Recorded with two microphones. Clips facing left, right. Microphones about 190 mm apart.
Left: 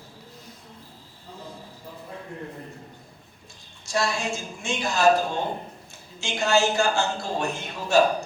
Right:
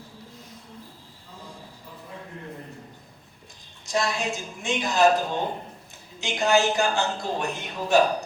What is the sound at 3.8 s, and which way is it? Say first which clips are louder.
A woman's voice: even; 20° right (ahead or behind).